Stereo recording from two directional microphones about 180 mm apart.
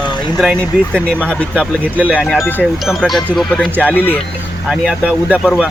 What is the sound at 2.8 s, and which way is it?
Speech, centre (ahead or behind).